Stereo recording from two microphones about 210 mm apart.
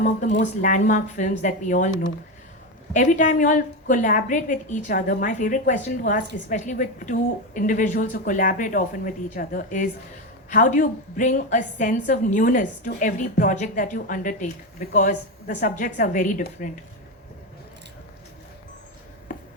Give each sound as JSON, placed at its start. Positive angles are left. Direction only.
{"t": 0.0, "sound": "a woman's voice", "side_deg": 35}
{"t": 19.3, "sound": "writing", "side_deg": 40}